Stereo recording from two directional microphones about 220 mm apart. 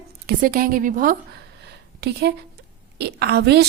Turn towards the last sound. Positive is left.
turn(degrees=-50)  # may be behind; listen again after turning